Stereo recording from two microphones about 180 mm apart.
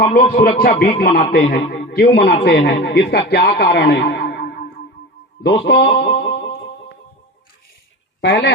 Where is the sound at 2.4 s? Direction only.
75° left (ahead or behind).